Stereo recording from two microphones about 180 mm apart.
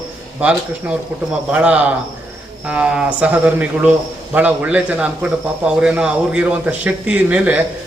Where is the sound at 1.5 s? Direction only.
5° right (ahead or behind).